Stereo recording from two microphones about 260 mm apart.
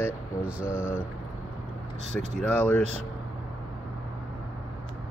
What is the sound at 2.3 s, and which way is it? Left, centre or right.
Speech, centre.